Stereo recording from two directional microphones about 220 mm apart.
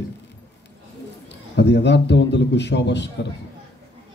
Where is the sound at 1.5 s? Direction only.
50° left (ahead or behind).